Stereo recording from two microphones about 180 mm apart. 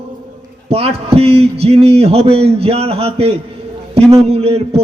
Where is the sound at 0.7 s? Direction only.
35° right (ahead or behind).